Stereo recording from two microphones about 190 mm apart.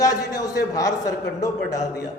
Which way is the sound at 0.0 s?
20° left (ahead or behind).